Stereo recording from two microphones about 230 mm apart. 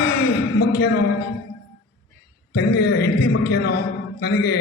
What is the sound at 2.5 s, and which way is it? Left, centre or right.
A man's voice, left.